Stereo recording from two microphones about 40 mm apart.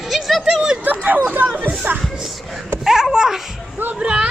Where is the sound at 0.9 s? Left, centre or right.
Right.